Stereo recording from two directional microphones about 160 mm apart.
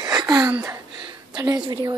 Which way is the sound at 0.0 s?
25° right (ahead or behind).